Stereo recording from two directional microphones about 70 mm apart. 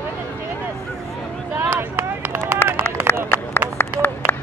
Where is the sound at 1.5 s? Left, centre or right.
Right.